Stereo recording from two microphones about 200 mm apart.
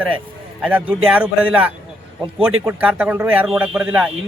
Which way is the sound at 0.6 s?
5° right (ahead or behind).